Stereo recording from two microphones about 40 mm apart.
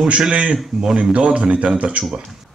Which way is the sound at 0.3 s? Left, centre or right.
Right.